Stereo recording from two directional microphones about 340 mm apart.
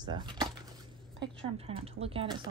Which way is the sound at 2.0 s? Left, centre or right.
Centre.